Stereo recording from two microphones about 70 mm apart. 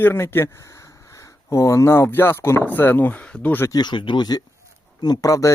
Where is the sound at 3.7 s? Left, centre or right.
Left.